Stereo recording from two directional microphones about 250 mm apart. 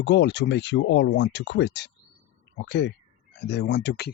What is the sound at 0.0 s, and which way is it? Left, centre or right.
Speech, left.